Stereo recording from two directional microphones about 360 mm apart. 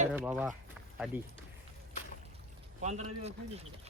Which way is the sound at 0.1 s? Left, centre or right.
Centre.